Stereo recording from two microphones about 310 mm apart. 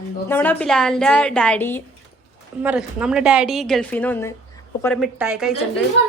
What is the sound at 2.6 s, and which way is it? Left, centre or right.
Speech, centre.